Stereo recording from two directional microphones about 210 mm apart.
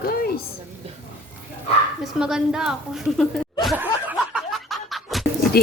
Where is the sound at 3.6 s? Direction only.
10° right (ahead or behind).